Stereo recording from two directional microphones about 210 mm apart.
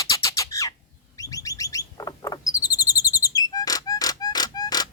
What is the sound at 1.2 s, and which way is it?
Bird, 15° left (ahead or behind).